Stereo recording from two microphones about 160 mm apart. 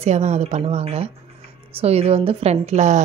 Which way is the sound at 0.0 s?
45° right (ahead or behind).